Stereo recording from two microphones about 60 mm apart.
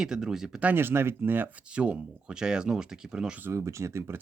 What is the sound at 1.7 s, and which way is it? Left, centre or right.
Speech, centre.